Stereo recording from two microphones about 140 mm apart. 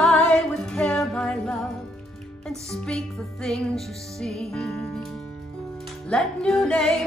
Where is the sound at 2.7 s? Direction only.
5° left (ahead or behind).